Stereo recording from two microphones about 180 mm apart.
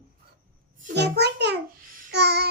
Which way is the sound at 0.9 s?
70° right (ahead or behind).